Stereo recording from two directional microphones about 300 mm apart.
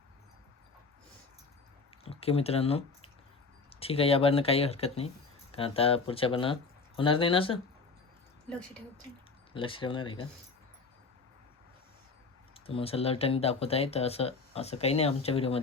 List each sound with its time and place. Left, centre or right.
2.0 s speech: centre
8.4 s speech: centre
9.5 s speech: centre
12.5 s speech: centre